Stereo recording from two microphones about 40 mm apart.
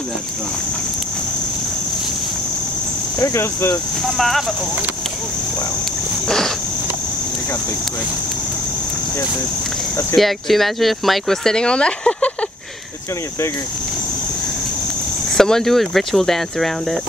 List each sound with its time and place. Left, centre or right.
4.0 s speech: centre
6.2 s a sound: centre
10.1 s speech: centre
11.4 s speech: left
15.3 s speech: centre